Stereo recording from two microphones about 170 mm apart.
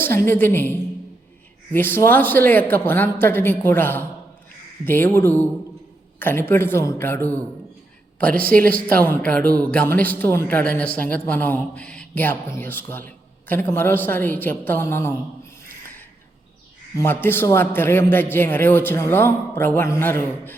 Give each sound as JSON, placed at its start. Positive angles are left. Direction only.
{"t": 0.0, "sound": "speech", "side_deg": 15}
{"t": 17.0, "sound": "speech", "side_deg": 10}